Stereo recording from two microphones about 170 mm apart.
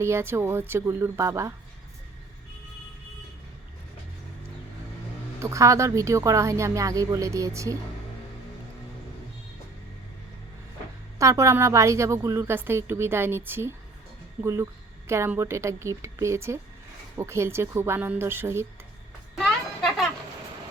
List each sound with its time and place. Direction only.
0.0 s a woman's voice: 15° right (ahead or behind)
5.4 s speech: 20° right (ahead or behind)
11.2 s a woman's voice: 20° right (ahead or behind)
19.4 s a sound: centre (ahead or behind)